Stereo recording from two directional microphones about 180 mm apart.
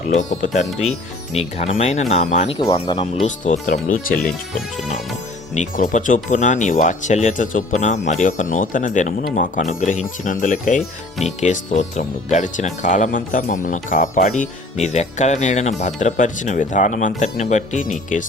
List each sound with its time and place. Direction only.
0.1 s speech: 40° left (ahead or behind)
3.2 s speech: 45° left (ahead or behind)
5.5 s speech: 45° left (ahead or behind)